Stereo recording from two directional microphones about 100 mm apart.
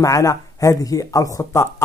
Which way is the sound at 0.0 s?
35° left (ahead or behind).